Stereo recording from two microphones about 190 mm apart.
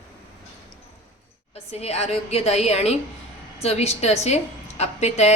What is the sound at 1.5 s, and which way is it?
A woman's voice, 30° left (ahead or behind).